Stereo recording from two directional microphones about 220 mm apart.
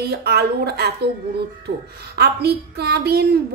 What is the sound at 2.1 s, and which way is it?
A woman's voice, 45° right (ahead or behind).